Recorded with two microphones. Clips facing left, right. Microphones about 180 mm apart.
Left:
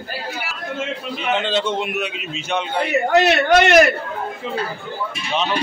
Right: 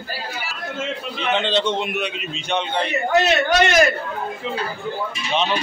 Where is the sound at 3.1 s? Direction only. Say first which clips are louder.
Left 3 dB; 65° left (ahead or behind).